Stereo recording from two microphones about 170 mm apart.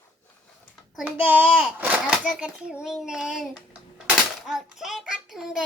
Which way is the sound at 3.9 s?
5° right (ahead or behind).